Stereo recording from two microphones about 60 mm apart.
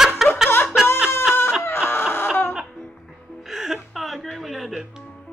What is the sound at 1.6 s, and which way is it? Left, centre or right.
Chicken, left.